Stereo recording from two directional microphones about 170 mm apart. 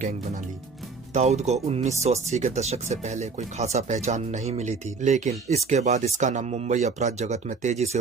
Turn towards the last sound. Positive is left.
turn(degrees=-40)  # may be behind; listen again after turning